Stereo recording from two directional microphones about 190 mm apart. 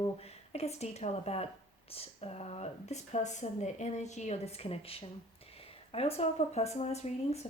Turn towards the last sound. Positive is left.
turn(degrees=35)  # may be behind; listen again after turning